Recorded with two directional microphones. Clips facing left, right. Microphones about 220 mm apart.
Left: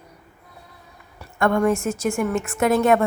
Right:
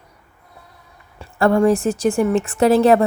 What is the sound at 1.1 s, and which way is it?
Speech, 30° right (ahead or behind).